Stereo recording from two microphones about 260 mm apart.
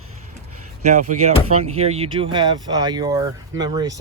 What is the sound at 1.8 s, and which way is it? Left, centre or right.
Speech, right.